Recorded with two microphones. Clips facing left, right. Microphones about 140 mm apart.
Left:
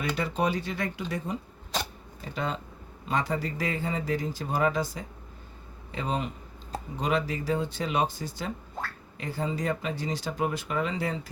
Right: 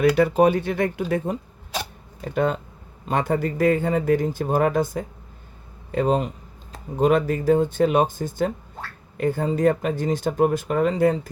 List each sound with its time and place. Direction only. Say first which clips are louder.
0.0 s speech: right 11 dB; 55° right (ahead or behind)